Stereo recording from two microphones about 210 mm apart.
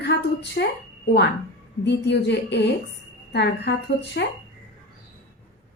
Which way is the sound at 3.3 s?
55° left (ahead or behind).